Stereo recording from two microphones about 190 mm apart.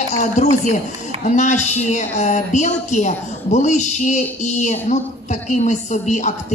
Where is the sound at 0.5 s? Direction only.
40° left (ahead or behind).